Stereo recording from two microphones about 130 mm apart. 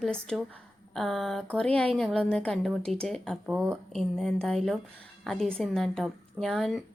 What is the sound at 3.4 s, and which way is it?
Speech, 10° right (ahead or behind).